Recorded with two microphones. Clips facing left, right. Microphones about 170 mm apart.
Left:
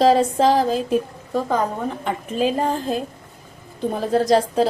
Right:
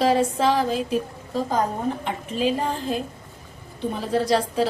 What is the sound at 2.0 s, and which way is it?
A woman's voice, 45° left (ahead or behind).